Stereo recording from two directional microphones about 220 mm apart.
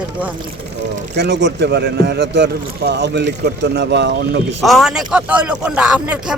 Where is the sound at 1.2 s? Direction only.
50° right (ahead or behind).